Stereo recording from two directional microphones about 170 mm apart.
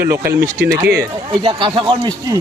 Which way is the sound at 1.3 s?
30° right (ahead or behind).